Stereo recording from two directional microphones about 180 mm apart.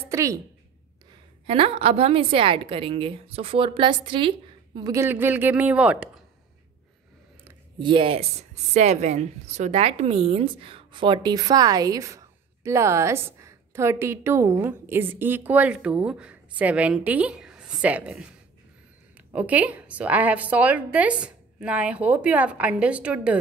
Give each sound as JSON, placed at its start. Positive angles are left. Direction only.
{"t": 0.1, "sound": "a sound", "side_deg": -15}
{"t": 1.5, "sound": "a woman's voice", "side_deg": -30}
{"t": 5.0, "sound": "a woman's voice", "side_deg": -10}
{"t": 7.8, "sound": "a woman's voice", "side_deg": -30}
{"t": 19.3, "sound": "a woman's voice", "side_deg": -10}